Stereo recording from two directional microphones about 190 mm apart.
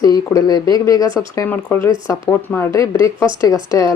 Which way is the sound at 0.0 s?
20° left (ahead or behind).